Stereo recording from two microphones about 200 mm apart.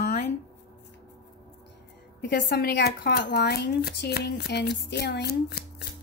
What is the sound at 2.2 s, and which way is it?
Speech, 55° left (ahead or behind).